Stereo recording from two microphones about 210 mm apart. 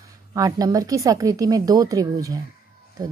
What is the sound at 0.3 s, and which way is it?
Speech, 15° right (ahead or behind).